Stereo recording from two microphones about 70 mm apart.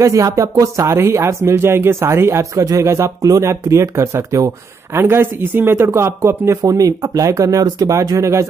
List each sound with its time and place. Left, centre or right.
0.0 s speech: right
2.5 s speech: right
4.9 s speech: right